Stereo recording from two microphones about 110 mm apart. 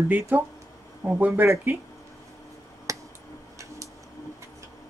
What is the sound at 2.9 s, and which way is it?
Finger snapping, 30° right (ahead or behind).